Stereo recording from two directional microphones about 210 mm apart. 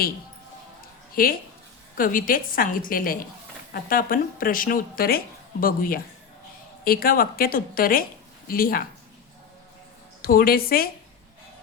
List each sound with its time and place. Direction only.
1.1 s a woman's voice: 45° left (ahead or behind)
10.2 s speech: 45° left (ahead or behind)